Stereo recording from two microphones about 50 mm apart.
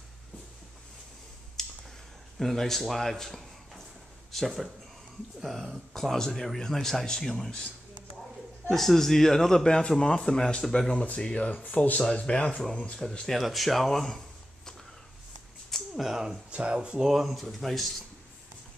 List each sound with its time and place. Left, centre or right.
1.6 s clicking: centre
2.3 s speech: centre
8.6 s speech: centre; by 13.0 s left
13.3 s speech: centre
15.7 s a sound: centre
16.4 s speech: right; by 17.8 s centre